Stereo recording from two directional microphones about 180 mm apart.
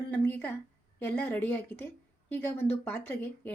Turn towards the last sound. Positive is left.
turn(degrees=10)  # may be behind; listen again after turning